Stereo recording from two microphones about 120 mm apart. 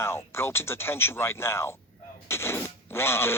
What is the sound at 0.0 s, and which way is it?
Speech, 20° left (ahead or behind).